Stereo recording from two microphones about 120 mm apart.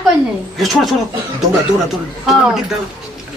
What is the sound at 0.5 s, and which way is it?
Speech, centre (ahead or behind).